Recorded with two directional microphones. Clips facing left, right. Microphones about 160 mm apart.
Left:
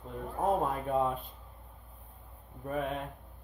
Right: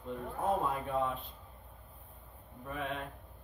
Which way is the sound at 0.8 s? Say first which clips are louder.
Left 4 dB; 45° left (ahead or behind).